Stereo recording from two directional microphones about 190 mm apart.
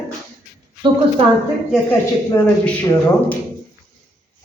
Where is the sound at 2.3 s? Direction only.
10° left (ahead or behind).